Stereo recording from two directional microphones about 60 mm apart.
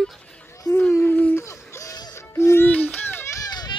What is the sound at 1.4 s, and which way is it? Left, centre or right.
Music, left.